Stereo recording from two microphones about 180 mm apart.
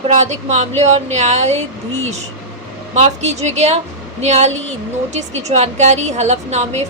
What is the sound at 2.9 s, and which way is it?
A woman's voice, 40° right (ahead or behind).